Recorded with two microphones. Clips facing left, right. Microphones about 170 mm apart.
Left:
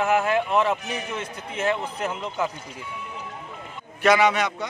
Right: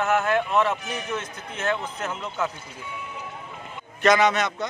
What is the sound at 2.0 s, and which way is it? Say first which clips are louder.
Speech: left 2 dB; 10° left (ahead or behind).